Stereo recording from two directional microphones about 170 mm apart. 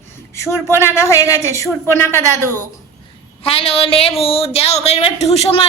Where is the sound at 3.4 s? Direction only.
35° left (ahead or behind).